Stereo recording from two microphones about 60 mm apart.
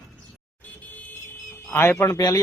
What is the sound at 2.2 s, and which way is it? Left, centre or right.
Speech, left.